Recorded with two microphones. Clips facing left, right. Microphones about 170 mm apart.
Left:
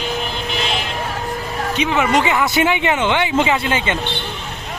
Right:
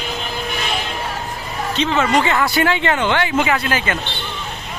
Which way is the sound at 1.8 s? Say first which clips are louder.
Even; 15° left (ahead or behind).